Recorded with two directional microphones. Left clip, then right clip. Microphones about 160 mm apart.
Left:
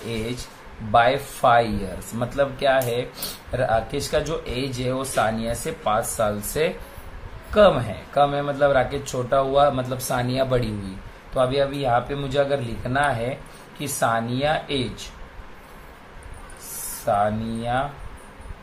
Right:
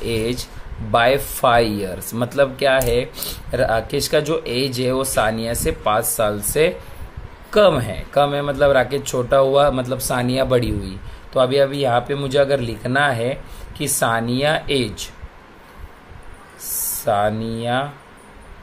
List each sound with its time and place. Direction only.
0.9 s speech: 55° right (ahead or behind)
7.5 s speech: 55° right (ahead or behind)
17.0 s speech: 55° right (ahead or behind)